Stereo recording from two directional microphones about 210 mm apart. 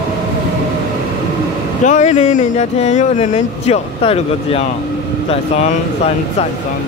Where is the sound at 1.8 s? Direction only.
35° left (ahead or behind).